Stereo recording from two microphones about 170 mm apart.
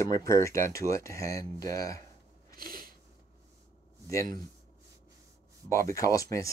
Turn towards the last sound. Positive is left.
turn(degrees=20)  # may be behind; listen again after turning